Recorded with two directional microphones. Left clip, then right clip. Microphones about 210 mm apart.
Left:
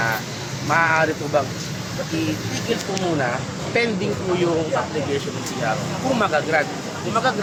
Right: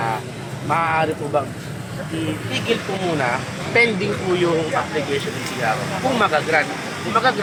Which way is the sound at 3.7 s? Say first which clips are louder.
Right 4 dB; centre (ahead or behind).